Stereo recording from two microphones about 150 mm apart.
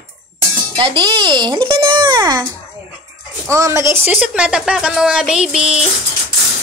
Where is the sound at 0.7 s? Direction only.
30° right (ahead or behind).